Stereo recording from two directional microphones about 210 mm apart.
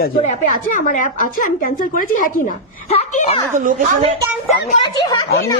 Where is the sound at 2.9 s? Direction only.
30° left (ahead or behind).